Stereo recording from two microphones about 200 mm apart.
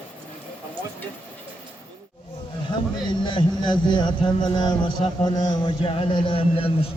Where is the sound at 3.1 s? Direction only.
25° left (ahead or behind).